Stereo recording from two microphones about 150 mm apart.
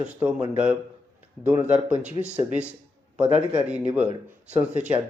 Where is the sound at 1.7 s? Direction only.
10° right (ahead or behind).